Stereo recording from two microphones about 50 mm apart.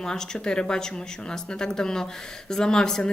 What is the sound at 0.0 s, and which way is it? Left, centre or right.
A woman's voice, centre.